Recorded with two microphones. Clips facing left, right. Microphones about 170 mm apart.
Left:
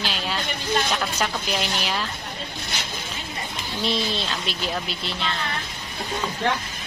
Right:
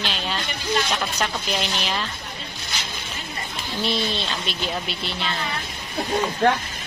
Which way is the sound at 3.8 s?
Centre (ahead or behind).